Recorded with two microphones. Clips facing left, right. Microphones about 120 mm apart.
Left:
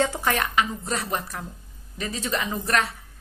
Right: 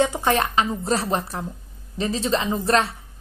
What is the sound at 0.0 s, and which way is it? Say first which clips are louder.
A woman's voice: right 4 dB; 20° right (ahead or behind).